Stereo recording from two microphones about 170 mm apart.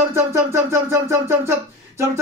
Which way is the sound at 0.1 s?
15° right (ahead or behind).